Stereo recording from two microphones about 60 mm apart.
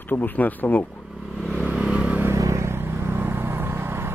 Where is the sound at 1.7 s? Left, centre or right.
Centre.